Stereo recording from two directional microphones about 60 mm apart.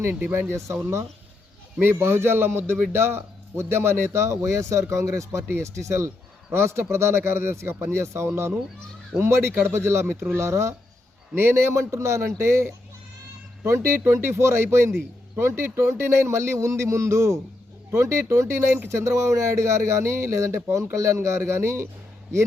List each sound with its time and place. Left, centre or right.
0.3 s a man's voice: right
1.8 s a man's voice: right
14.0 s a man's voice: right
17.9 s a man's voice: right